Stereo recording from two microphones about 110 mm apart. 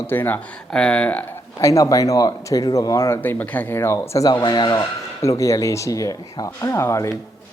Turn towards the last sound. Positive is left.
turn(degrees=25)  # may be behind; listen again after turning